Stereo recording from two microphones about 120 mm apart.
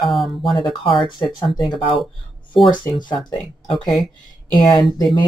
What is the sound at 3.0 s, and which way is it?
Speech, 40° left (ahead or behind).